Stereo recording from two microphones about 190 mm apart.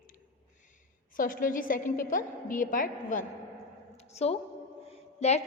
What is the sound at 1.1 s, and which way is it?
A woman's voice, 45° left (ahead or behind).